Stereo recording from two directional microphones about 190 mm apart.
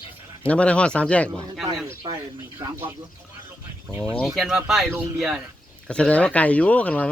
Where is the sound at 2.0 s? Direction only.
25° right (ahead or behind).